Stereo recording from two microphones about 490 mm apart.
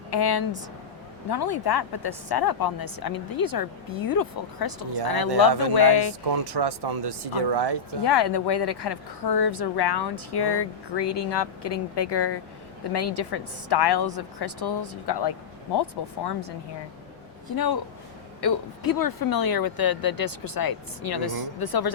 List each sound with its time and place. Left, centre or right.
0.1 s a woman's voice: left
6.3 s speech: right
8.0 s a woman's voice: left
17.5 s a woman's voice: left